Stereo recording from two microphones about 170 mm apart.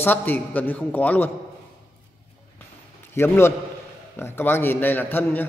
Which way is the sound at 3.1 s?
15° left (ahead or behind).